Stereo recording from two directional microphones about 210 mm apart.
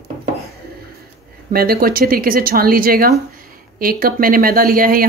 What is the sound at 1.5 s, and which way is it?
A woman's voice, 45° right (ahead or behind).